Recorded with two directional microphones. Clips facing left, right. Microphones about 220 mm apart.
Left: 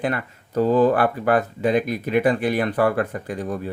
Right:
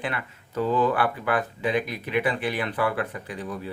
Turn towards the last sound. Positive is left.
turn(degrees=45)  # may be behind; listen again after turning